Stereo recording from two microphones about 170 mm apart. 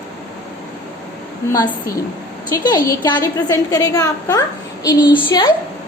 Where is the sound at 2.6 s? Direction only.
20° left (ahead or behind).